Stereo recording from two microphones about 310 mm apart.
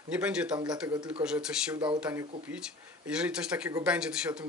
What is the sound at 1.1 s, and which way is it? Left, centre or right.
Speech, centre.